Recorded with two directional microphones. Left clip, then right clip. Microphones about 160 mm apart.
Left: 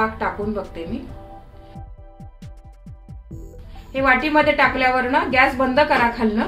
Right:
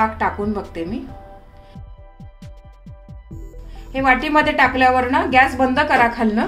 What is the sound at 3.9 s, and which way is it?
A woman's voice, 90° right.